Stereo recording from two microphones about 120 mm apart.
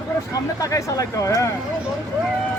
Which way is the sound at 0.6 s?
25° left (ahead or behind).